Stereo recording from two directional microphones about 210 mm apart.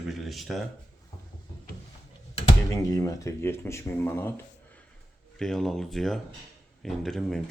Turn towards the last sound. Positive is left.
turn(degrees=0)  # may be behind; listen again after turning